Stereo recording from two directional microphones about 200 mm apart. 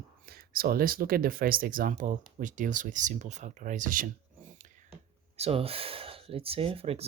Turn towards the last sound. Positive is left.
turn(degrees=-30)  # may be behind; listen again after turning